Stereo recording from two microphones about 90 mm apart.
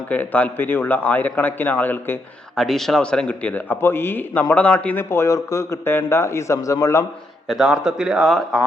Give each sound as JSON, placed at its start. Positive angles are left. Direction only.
{"t": 0.1, "sound": "a man's voice", "side_deg": 15}
{"t": 2.6, "sound": "a man's voice", "side_deg": 5}
{"t": 5.0, "sound": "a man's voice", "side_deg": 30}
{"t": 7.4, "sound": "speech", "side_deg": 0}